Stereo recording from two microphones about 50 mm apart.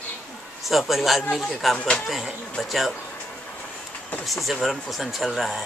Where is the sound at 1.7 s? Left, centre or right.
Centre.